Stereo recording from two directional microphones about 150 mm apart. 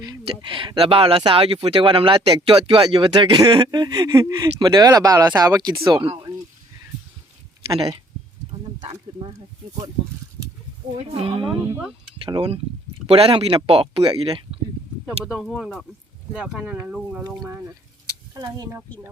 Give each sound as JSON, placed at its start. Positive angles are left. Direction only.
{"t": 0.0, "sound": "speech", "side_deg": -30}
{"t": 10.9, "sound": "speech", "side_deg": -40}
{"t": 11.8, "sound": "speech", "side_deg": -5}
{"t": 12.2, "sound": "speech", "side_deg": -40}
{"t": 15.0, "sound": "speech", "side_deg": -5}
{"t": 17.5, "sound": "speech", "side_deg": -20}